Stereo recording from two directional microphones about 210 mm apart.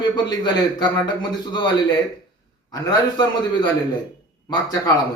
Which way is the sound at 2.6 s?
20° left (ahead or behind).